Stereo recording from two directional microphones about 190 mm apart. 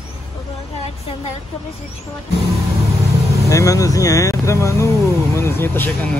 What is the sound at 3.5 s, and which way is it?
Speech, 15° left (ahead or behind).